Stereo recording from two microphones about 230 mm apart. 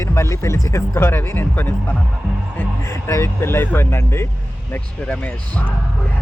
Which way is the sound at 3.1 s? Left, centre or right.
Centre.